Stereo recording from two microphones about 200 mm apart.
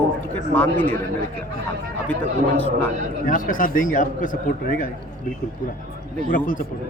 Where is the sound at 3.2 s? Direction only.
45° left (ahead or behind).